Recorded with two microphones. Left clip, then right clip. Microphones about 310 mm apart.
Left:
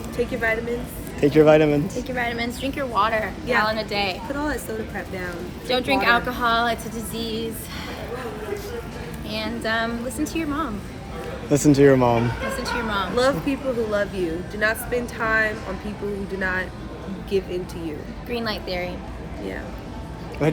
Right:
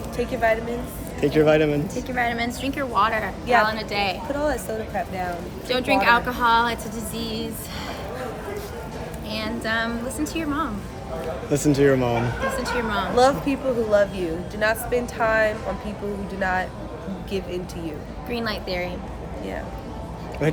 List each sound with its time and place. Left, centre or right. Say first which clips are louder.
0.2 s speech: right 1 dB; centre
1.2 s speech: left 3 dB; centre
2.0 s a woman's voice: right 1 dB; centre
4.4 s a woman's voice: right 2 dB; centre
9.3 s a woman's voice: left 1 dB; centre
11.5 s speech: left 3 dB; centre
12.5 s a woman's voice: left 1 dB; centre
13.1 s speech: right 4 dB; centre
18.3 s a woman's voice: even; centre
20.4 s speech: left 1 dB; centre